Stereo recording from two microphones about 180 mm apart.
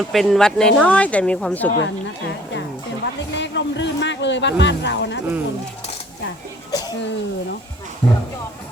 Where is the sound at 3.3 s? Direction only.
80° left.